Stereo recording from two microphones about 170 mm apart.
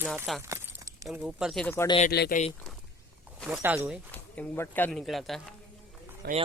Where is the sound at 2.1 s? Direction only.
70° left (ahead or behind).